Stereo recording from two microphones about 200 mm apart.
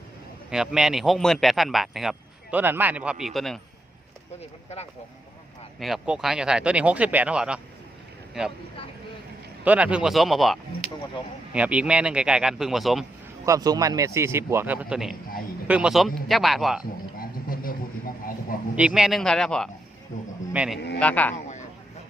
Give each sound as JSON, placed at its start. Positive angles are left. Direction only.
{"t": 0.5, "sound": "a man's voice", "side_deg": -5}
{"t": 5.8, "sound": "a man's voice", "side_deg": 0}
{"t": 9.6, "sound": "a man's voice", "side_deg": -5}
{"t": 13.4, "sound": "a man's voice", "side_deg": -15}
{"t": 17.2, "sound": "vehicle", "side_deg": 45}
{"t": 18.8, "sound": "a man's voice", "side_deg": -5}
{"t": 20.1, "sound": "a sound", "side_deg": 40}
{"t": 20.5, "sound": "speech", "side_deg": -5}
{"t": 20.7, "sound": "a man's voice", "side_deg": 55}
{"t": 21.0, "sound": "speech", "side_deg": 5}